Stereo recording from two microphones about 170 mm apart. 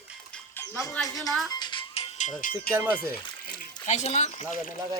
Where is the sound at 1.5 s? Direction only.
25° left (ahead or behind); by 2.7 s 50° left (ahead or behind).